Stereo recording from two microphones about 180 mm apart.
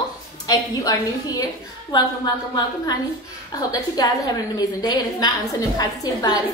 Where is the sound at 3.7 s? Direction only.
20° left (ahead or behind).